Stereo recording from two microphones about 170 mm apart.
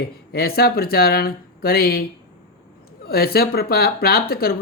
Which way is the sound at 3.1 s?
65° left (ahead or behind).